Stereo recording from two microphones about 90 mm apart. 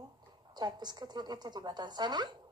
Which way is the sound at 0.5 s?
50° right (ahead or behind).